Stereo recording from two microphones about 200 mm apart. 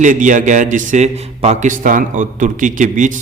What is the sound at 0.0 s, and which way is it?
A man's voice, 40° right (ahead or behind).